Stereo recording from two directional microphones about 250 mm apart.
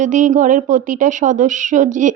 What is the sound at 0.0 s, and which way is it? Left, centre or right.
A woman's voice, right.